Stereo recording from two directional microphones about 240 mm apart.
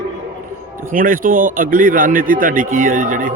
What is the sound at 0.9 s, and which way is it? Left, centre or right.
A man's voice, right.